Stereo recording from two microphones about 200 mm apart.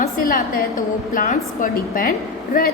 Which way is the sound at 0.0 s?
45° left (ahead or behind).